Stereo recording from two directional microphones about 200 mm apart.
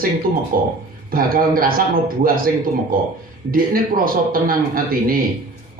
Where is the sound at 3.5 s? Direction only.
45° right (ahead or behind).